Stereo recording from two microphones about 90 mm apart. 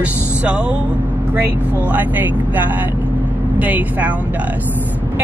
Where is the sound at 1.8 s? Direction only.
20° right (ahead or behind).